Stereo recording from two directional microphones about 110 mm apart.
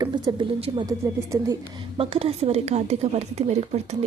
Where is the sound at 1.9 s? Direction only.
60° right (ahead or behind).